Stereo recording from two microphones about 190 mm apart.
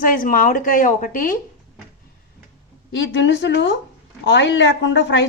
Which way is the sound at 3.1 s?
70° left (ahead or behind).